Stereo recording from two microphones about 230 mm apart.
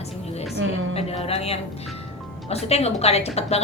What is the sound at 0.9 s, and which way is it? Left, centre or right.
A woman's voice, left.